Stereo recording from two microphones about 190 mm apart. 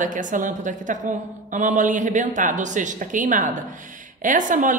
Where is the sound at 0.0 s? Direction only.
45° right (ahead or behind).